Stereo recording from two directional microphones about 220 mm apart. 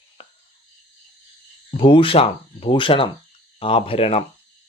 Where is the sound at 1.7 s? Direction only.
25° left (ahead or behind).